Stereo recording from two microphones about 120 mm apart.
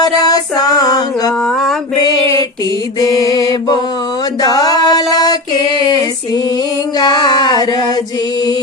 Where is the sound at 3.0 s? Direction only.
30° left (ahead or behind).